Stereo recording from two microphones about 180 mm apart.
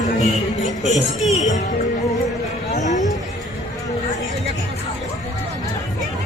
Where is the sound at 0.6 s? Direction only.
40° left (ahead or behind).